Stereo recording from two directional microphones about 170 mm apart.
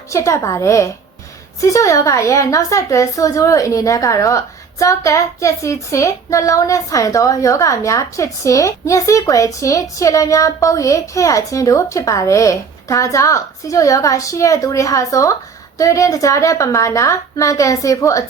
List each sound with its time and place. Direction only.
0.1 s a woman's voice: 20° left (ahead or behind)